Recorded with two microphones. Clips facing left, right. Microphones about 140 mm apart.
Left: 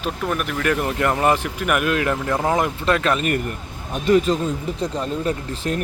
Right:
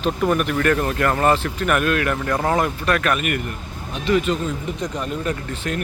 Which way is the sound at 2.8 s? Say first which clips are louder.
Left 1 dB; 25° left (ahead or behind).